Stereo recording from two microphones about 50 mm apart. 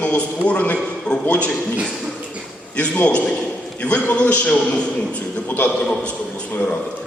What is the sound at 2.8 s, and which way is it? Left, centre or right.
A man's voice, left.